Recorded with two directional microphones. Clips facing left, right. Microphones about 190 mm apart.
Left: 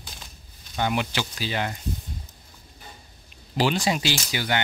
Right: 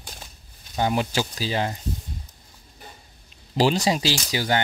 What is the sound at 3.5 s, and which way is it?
Speech, 40° right (ahead or behind).